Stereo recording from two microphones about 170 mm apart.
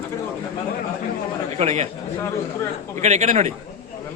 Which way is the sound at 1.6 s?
40° right (ahead or behind).